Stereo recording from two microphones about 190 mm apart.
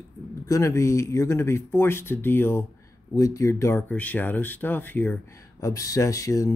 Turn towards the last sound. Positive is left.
turn(degrees=15)  # may be behind; listen again after turning